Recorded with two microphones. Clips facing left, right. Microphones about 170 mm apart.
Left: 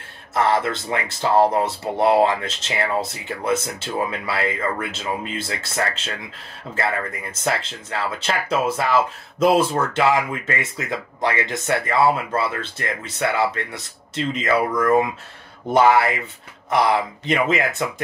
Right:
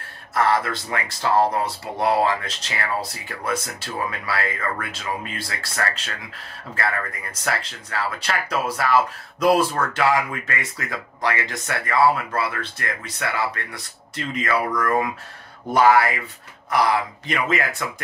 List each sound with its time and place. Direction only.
0.3 s speech: 25° left (ahead or behind)
17.3 s speech: 25° left (ahead or behind)